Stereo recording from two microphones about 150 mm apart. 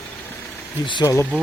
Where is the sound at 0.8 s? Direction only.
30° left (ahead or behind).